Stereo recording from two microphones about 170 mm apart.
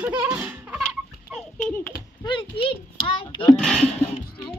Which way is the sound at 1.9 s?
30° left (ahead or behind).